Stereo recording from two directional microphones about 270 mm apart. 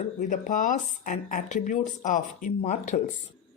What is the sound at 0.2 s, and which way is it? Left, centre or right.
Speech, left.